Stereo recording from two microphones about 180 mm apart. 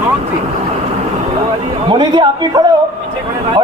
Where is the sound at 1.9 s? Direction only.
25° right (ahead or behind).